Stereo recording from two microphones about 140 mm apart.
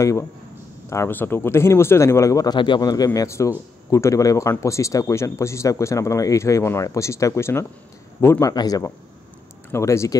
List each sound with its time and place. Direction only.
0.8 s speech: 20° left (ahead or behind)